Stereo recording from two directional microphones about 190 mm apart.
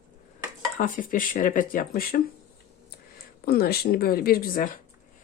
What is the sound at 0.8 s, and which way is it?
Speech, 45° left (ahead or behind).